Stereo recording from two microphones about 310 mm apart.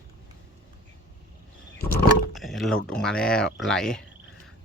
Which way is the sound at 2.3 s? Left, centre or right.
Centre.